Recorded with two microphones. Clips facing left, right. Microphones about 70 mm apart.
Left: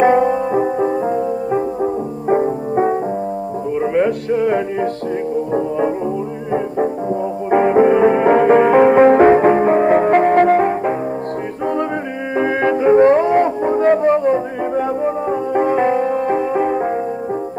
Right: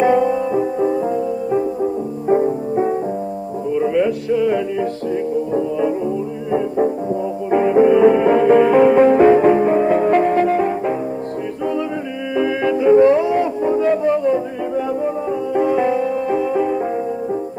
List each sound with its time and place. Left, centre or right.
0.0 s music: left
7.5 s music: left
12.4 s music: left